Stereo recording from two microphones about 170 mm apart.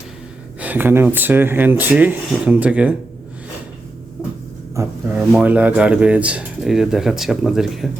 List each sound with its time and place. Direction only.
0.6 s speech: 10° right (ahead or behind)
4.7 s speech: 15° right (ahead or behind); by 7.9 s centre (ahead or behind)